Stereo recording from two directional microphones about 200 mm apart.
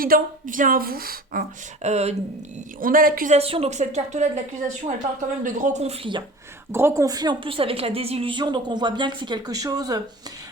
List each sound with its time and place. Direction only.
0.0 s a woman's voice: 45° right (ahead or behind)
2.8 s a woman's voice: 45° right (ahead or behind)
3.3 s a woman's voice: 30° right (ahead or behind)
5.4 s a woman's voice: 35° right (ahead or behind)
6.7 s a woman's voice: 10° right (ahead or behind)